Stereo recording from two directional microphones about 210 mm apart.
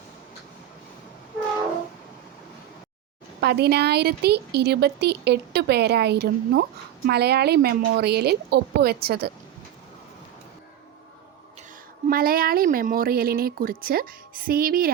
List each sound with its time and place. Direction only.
3.4 s speech: 50° right (ahead or behind)
12.0 s speech: 45° right (ahead or behind)